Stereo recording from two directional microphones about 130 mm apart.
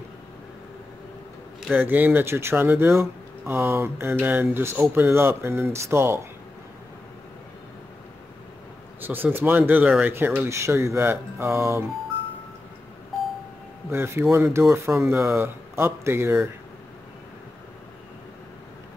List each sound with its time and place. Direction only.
1.7 s speech: 15° right (ahead or behind)
9.0 s speech: 15° right (ahead or behind)
13.8 s speech: 20° right (ahead or behind)